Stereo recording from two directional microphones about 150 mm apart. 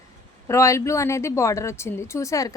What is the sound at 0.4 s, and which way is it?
A woman's voice, 20° left (ahead or behind).